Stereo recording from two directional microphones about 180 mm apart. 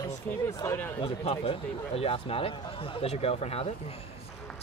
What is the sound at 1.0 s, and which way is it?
Speech, 30° left (ahead or behind).